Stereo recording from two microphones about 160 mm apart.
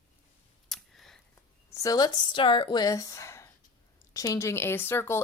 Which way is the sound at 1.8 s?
25° left (ahead or behind).